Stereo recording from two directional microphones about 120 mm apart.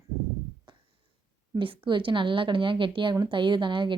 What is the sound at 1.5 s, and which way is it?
A woman's voice, 45° right (ahead or behind).